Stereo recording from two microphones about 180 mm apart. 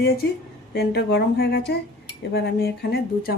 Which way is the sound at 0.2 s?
65° left (ahead or behind).